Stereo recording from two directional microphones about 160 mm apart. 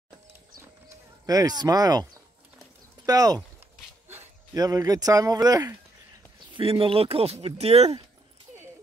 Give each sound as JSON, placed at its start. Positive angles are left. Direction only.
{"t": 1.2, "sound": "speech", "side_deg": -25}
{"t": 3.1, "sound": "speech", "side_deg": -25}
{"t": 6.5, "sound": "speech", "side_deg": -35}